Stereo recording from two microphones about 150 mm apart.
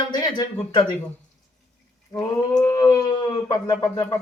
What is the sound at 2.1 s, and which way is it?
Speech, 25° left (ahead or behind).